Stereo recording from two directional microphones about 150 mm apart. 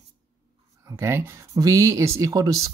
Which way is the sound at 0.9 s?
15° right (ahead or behind).